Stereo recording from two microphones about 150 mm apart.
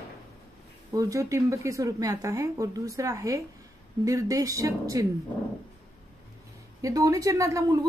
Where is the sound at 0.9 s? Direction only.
20° right (ahead or behind).